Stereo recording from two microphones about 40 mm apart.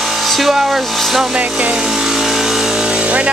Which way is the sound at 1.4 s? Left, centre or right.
Right.